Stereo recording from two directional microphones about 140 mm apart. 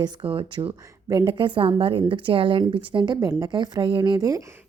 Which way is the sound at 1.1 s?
25° right (ahead or behind).